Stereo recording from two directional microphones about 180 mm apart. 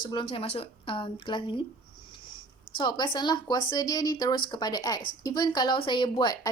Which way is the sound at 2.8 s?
25° left (ahead or behind).